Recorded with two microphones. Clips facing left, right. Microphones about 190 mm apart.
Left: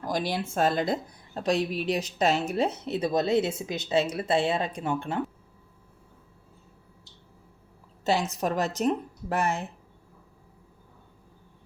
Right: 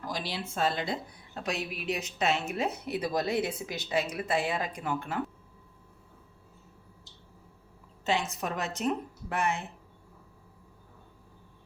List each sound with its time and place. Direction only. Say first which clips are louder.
0.1 s a woman's voice: left 8 dB; 50° left (ahead or behind); by 5.2 s 30° left (ahead or behind)
8.0 s a woman's voice: left 4 dB; 40° left (ahead or behind)